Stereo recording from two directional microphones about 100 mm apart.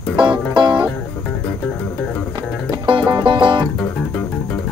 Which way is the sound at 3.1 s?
55° right (ahead or behind).